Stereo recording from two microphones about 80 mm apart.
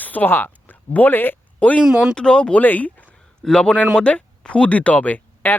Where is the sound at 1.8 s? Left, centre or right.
Centre.